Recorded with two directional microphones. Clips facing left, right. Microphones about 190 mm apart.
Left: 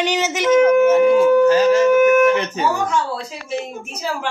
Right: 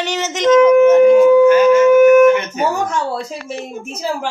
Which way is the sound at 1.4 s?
35° left (ahead or behind).